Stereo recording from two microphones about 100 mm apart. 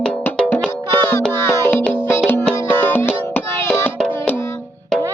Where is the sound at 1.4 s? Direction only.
20° left (ahead or behind).